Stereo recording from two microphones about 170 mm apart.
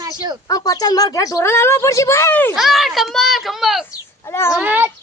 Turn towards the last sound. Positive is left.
turn(degrees=-10)  # may be behind; listen again after turning